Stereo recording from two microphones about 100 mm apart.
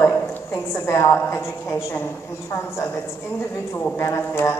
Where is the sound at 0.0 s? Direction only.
25° left (ahead or behind).